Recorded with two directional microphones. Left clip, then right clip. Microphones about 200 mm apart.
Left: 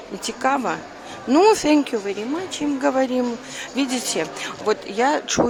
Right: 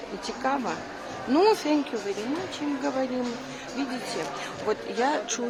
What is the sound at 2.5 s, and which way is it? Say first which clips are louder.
Speech: left 11 dB; 45° left (ahead or behind).